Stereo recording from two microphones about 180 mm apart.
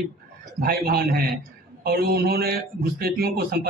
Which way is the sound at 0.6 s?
60° right (ahead or behind).